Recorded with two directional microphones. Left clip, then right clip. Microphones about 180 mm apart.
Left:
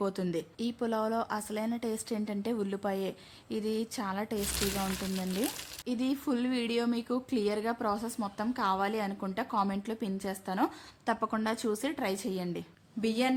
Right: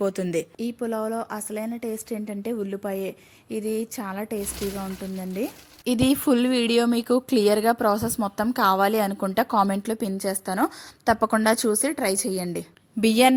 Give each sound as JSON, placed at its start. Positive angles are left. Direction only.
{"t": 0.0, "sound": "a woman's voice", "side_deg": -15}
{"t": 5.8, "sound": "a woman's voice", "side_deg": -50}
{"t": 13.0, "sound": "a woman's voice", "side_deg": -50}